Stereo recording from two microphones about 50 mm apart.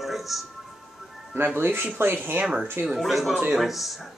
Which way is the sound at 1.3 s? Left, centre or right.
Right.